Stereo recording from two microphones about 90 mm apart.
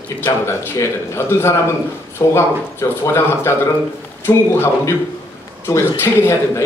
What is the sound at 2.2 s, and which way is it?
A man's voice, 40° left (ahead or behind).